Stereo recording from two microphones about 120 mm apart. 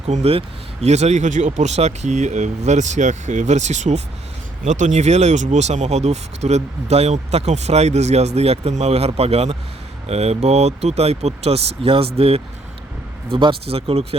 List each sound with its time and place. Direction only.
0.1 s speech: 60° right (ahead or behind)